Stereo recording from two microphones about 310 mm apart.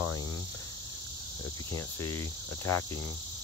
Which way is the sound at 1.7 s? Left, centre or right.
Centre.